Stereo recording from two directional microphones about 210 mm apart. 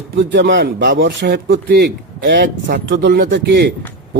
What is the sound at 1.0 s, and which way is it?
A man's voice, 45° right (ahead or behind).